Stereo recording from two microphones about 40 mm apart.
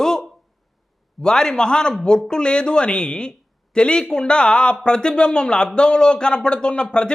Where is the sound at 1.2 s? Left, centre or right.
Centre.